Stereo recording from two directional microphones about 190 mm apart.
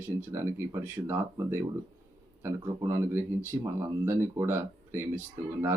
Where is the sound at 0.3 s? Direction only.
15° right (ahead or behind).